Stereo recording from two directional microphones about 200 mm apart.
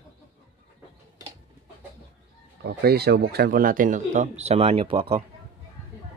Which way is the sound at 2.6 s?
50° right (ahead or behind).